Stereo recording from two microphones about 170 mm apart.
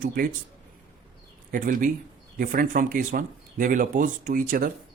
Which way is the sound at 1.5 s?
55° right (ahead or behind).